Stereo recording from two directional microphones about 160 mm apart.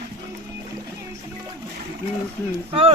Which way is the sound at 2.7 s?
35° right (ahead or behind).